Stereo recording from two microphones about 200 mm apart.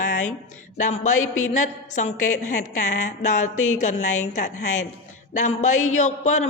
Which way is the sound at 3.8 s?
35° left (ahead or behind).